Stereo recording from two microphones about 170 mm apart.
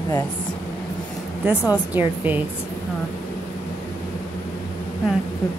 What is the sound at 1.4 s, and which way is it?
Speech, 10° right (ahead or behind).